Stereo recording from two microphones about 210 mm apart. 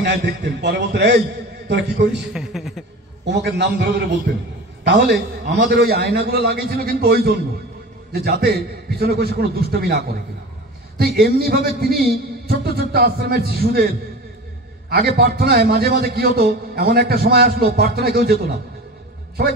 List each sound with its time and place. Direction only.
0.0 s a man's voice: 50° right (ahead or behind)
2.3 s a sound: centre (ahead or behind)
3.3 s a man's voice: 55° right (ahead or behind)
14.9 s a man's voice: 50° right (ahead or behind)